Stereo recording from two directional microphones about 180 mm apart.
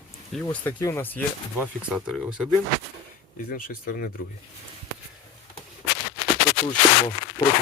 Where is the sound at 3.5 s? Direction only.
50° left (ahead or behind).